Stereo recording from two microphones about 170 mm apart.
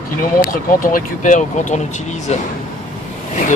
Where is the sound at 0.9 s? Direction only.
50° left (ahead or behind).